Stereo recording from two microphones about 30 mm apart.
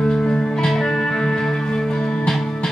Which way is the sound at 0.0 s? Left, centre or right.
Centre.